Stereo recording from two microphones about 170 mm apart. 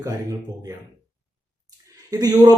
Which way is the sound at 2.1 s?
25° right (ahead or behind).